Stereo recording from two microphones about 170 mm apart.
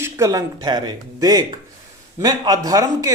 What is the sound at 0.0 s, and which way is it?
Speech, 20° right (ahead or behind).